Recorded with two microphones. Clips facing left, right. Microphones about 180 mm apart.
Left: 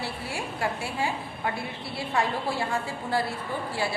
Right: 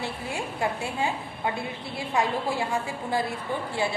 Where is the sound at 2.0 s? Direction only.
15° right (ahead or behind).